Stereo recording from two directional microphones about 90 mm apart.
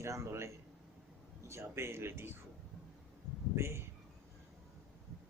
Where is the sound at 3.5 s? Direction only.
30° right (ahead or behind).